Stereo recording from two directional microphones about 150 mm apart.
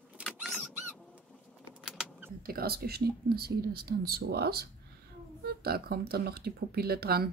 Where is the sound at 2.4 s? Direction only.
85° right.